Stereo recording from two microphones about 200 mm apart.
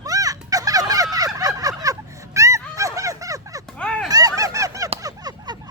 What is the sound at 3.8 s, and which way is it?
Fowl, 5° left (ahead or behind).